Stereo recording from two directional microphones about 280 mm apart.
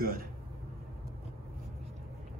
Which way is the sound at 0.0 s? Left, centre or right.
Right.